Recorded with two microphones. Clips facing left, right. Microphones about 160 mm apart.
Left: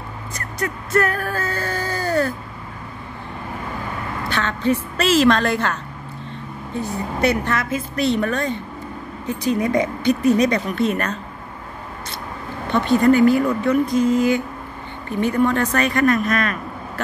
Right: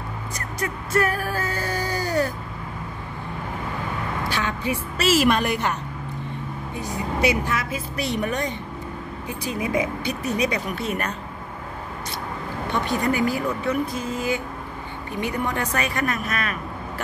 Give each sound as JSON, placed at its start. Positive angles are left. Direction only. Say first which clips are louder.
{"t": 0.6, "sound": "a sound", "louder": "left 3 dB", "side_deg": -10}
{"t": 4.3, "sound": "speech", "louder": "left 8 dB", "side_deg": -10}
{"t": 7.2, "sound": "speech", "louder": "left 4 dB", "side_deg": -10}
{"t": 12.7, "sound": "speech", "louder": "left 9 dB", "side_deg": -15}